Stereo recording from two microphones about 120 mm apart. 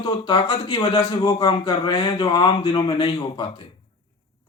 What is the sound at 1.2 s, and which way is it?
Speech, 35° left (ahead or behind).